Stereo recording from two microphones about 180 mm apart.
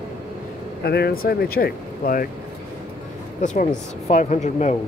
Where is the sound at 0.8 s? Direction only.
60° left (ahead or behind).